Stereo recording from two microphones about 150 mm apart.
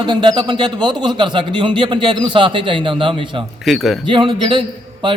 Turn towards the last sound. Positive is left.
turn(degrees=-35)  # may be behind; listen again after turning